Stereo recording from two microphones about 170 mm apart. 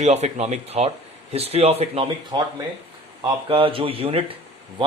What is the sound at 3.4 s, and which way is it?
Speech, 30° right (ahead or behind).